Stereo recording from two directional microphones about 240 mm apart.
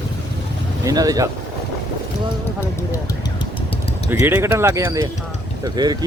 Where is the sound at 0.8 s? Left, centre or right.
Centre.